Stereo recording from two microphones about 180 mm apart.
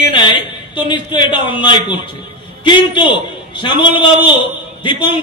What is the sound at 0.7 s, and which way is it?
A man's voice, 25° left (ahead or behind).